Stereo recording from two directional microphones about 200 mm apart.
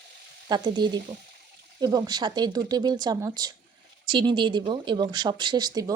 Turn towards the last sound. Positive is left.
turn(degrees=-20)  # may be behind; listen again after turning